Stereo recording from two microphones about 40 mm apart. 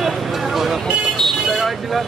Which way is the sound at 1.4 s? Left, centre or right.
Centre.